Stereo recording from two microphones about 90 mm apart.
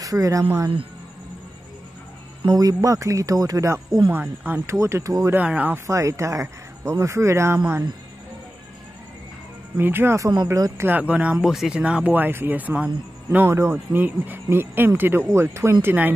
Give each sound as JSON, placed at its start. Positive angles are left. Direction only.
{"t": 0.0, "sound": "speech", "side_deg": -40}
{"t": 2.4, "sound": "speech", "side_deg": -40}
{"t": 4.1, "sound": "speech", "side_deg": -20}
{"t": 4.7, "sound": "speech", "side_deg": -35}
{"t": 5.3, "sound": "speech", "side_deg": -15}
{"t": 5.9, "sound": "speech", "side_deg": -35}
{"t": 9.8, "sound": "speech", "side_deg": -25}
{"t": 11.4, "sound": "speech", "side_deg": -5}
{"t": 11.8, "sound": "speech", "side_deg": -15}
{"t": 13.5, "sound": "speech", "side_deg": -30}